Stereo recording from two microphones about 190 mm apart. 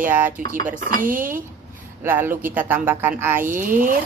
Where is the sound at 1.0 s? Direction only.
45° right (ahead or behind).